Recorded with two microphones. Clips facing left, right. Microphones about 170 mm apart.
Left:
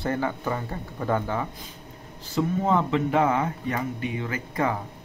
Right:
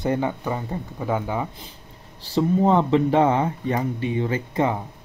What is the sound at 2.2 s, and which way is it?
Speech, 35° right (ahead or behind).